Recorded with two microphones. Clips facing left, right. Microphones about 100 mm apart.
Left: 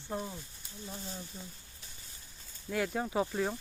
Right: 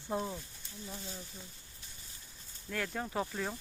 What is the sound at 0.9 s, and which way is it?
Speech, 35° left (ahead or behind).